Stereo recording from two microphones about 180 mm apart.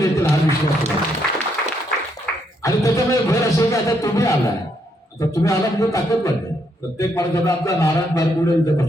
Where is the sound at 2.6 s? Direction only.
15° left (ahead or behind).